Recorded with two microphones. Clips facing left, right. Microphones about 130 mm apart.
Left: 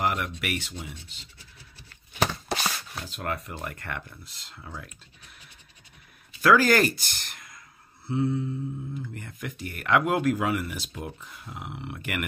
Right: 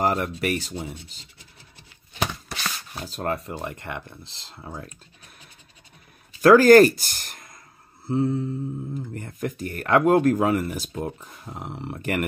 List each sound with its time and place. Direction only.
0.0 s speech: 35° right (ahead or behind)
2.9 s speech: 30° right (ahead or behind)
6.4 s speech: 45° right (ahead or behind)